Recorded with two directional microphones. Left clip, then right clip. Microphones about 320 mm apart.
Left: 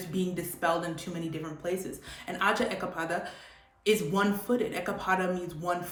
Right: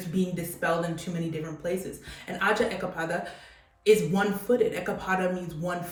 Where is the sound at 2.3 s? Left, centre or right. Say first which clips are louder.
Right 2 dB; centre.